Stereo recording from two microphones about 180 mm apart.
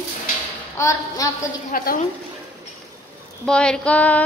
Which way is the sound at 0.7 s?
15° left (ahead or behind).